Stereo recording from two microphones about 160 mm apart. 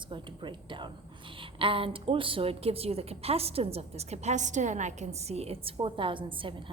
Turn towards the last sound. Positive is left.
turn(degrees=-30)  # may be behind; listen again after turning